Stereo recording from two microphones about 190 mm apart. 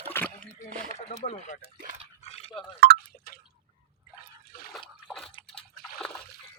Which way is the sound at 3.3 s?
55° left (ahead or behind).